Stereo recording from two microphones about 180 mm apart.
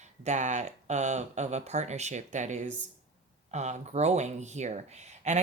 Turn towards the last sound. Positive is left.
turn(degrees=-40)  # may be behind; listen again after turning